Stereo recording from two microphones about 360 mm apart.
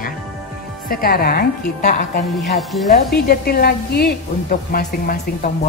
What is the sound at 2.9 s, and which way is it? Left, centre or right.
A woman's voice, left.